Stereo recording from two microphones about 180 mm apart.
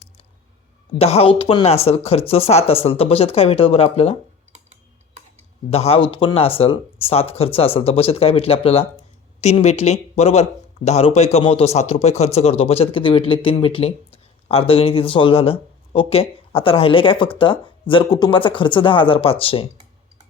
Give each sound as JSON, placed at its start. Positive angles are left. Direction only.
{"t": 0.9, "sound": "a man's voice", "side_deg": 35}
{"t": 4.5, "sound": "typing", "side_deg": -40}
{"t": 5.7, "sound": "a man's voice", "side_deg": 35}